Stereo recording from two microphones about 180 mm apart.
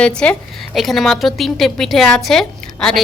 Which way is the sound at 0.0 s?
5° left (ahead or behind).